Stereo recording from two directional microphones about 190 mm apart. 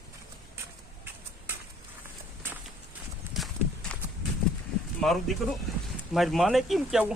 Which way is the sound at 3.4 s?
Centre (ahead or behind).